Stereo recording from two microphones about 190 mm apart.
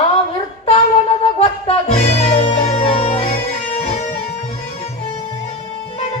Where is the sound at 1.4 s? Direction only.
30° left (ahead or behind).